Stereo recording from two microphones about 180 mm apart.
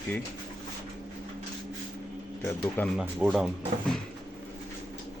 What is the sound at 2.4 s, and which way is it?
Speech, 10° left (ahead or behind).